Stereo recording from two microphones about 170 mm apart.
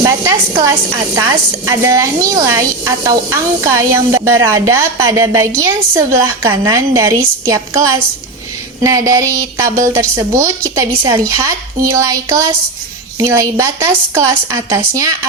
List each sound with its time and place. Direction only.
0.0 s a woman's voice: 20° right (ahead or behind)